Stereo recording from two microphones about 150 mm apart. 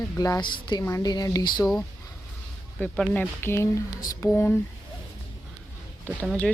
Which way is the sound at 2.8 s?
10° left (ahead or behind).